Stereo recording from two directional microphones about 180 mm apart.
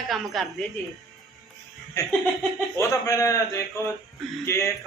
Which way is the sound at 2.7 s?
15° left (ahead or behind).